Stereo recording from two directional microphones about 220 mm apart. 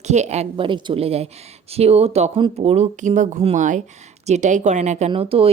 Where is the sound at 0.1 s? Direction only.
30° right (ahead or behind).